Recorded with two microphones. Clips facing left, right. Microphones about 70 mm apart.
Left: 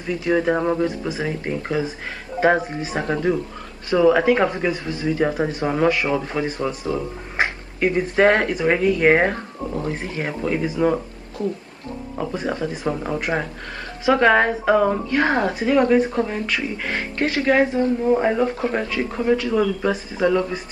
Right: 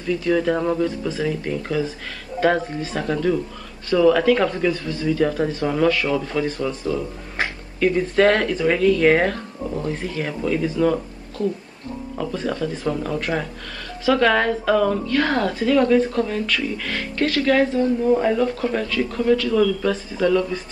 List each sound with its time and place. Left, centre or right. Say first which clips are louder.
0.0 s a woman's voice: even; left